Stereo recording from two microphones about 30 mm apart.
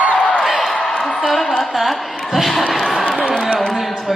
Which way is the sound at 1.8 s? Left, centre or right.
Centre.